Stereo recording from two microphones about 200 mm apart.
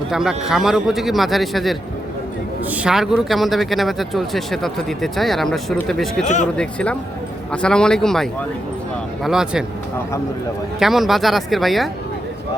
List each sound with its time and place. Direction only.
0.1 s speech: 5° right (ahead or behind)
6.2 s speech: 35° left (ahead or behind)
6.6 s speech: 5° left (ahead or behind)
10.8 s speech: centre (ahead or behind)